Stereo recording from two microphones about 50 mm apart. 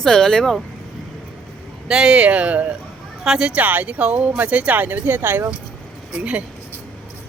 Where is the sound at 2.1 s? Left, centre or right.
Right.